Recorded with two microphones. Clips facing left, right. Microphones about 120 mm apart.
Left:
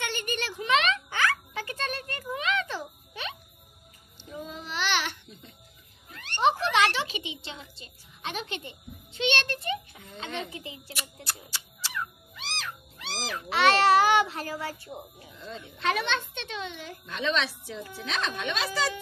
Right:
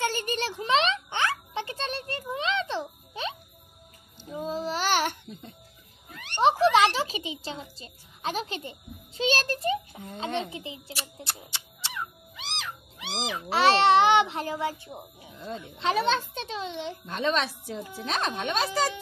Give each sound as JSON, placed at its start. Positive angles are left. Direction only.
{"t": 0.0, "sound": "a sound", "side_deg": -35}
{"t": 4.3, "sound": "child singing", "side_deg": -35}
{"t": 6.1, "sound": "a sound", "side_deg": -15}
{"t": 6.6, "sound": "a child's voice", "side_deg": -30}
{"t": 12.0, "sound": "cat", "side_deg": -15}
{"t": 13.5, "sound": "a child's voice", "side_deg": -30}
{"t": 15.3, "sound": "a sound", "side_deg": -50}
{"t": 15.8, "sound": "a child's voice", "side_deg": -30}
{"t": 17.0, "sound": "a woman's voice", "side_deg": -45}